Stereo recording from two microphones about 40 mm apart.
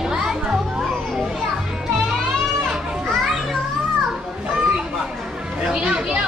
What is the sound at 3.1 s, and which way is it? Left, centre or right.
Children playing, centre.